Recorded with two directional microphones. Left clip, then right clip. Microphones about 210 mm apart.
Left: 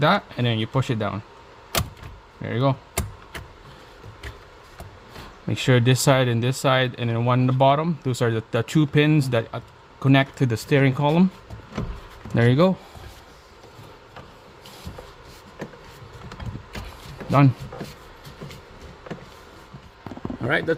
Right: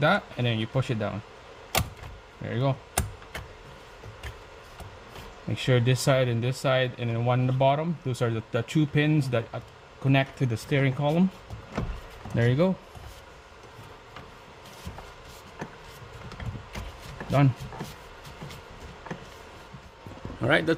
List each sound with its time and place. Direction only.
0.0 s speech: 55° left (ahead or behind)
2.4 s speech: 55° left (ahead or behind)
5.5 s speech: 55° left (ahead or behind)
12.4 s speech: 55° left (ahead or behind)
20.4 s speech: 20° right (ahead or behind)